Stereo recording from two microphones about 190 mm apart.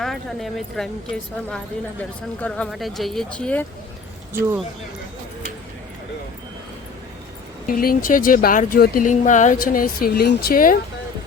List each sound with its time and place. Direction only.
0.0 s speech: centre (ahead or behind)
4.4 s speech: 10° right (ahead or behind)
7.7 s speech: 50° left (ahead or behind)